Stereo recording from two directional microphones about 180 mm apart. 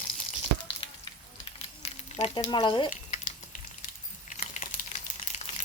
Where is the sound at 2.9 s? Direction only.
45° left (ahead or behind).